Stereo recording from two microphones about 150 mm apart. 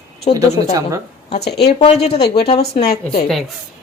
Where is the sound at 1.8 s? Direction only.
45° left (ahead or behind).